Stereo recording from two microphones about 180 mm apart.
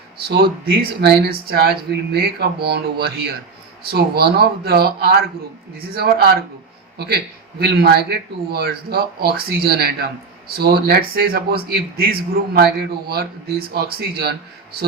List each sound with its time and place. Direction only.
0.2 s speech: 60° right (ahead or behind)
7.6 s speech: 60° right (ahead or behind)